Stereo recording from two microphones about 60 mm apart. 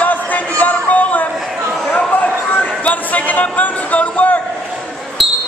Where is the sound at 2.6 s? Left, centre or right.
Left.